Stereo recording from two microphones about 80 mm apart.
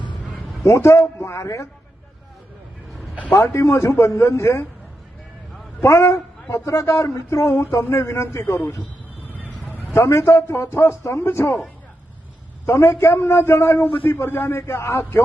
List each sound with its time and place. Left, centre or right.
0.6 s a man's voice: left
3.3 s a man's voice: left
5.8 s a man's voice: left
9.9 s a man's voice: left
12.6 s a man's voice: left